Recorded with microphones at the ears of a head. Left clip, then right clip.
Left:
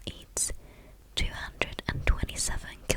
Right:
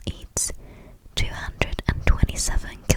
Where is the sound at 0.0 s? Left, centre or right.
Right.